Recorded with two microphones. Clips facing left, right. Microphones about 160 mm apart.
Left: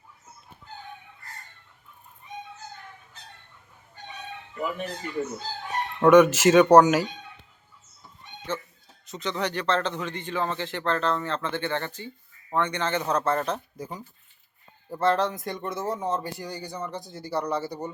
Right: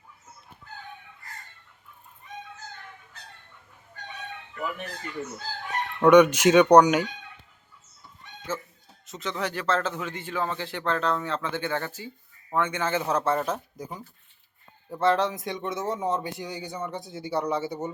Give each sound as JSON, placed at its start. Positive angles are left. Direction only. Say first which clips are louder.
{"t": 4.5, "sound": "speech", "louder": "left 3 dB", "side_deg": 20}
{"t": 6.0, "sound": "speech", "louder": "even", "side_deg": 5}
{"t": 8.5, "sound": "fowl", "louder": "left 1 dB", "side_deg": -5}
{"t": 9.0, "sound": "speech", "louder": "left 2 dB", "side_deg": 0}